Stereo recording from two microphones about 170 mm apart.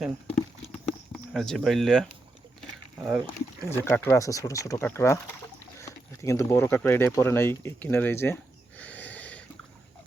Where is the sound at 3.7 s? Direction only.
15° left (ahead or behind).